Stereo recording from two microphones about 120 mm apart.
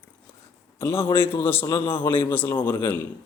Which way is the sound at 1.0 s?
20° left (ahead or behind).